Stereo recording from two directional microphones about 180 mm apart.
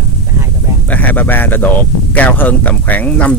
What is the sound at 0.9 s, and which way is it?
Speech, 10° left (ahead or behind).